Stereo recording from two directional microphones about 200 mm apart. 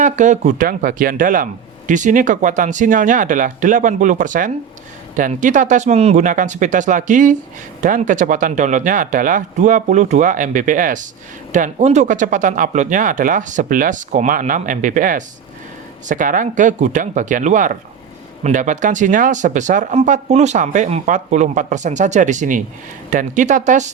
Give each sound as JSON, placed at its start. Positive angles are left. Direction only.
{"t": 0.0, "sound": "speech", "side_deg": -35}